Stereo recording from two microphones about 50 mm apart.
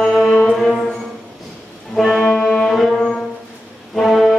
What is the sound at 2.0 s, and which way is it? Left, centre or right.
Music, centre.